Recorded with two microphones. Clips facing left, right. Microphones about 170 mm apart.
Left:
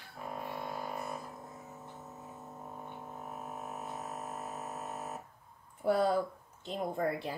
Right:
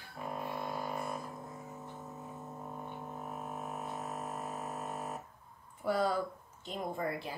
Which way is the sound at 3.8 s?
5° left (ahead or behind).